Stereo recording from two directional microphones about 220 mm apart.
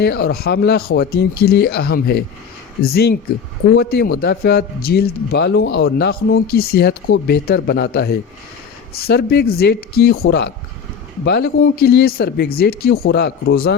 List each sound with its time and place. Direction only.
0.0 s a man's voice: 45° left (ahead or behind)